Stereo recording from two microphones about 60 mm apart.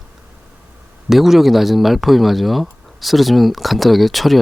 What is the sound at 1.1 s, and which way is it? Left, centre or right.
Speech, centre.